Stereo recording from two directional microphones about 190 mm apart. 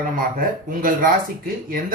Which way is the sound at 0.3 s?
45° right (ahead or behind).